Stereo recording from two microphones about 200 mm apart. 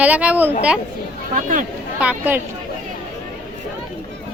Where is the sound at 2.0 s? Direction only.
10° right (ahead or behind).